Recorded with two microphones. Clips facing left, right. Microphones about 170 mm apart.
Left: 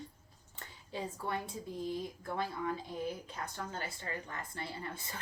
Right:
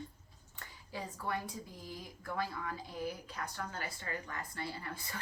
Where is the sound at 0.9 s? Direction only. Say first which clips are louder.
Left 1 dB; 25° left (ahead or behind).